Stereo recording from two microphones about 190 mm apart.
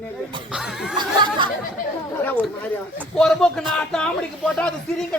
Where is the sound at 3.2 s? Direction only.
5° left (ahead or behind).